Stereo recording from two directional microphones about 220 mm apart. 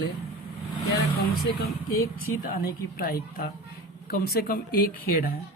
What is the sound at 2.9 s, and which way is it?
Speech, 40° left (ahead or behind).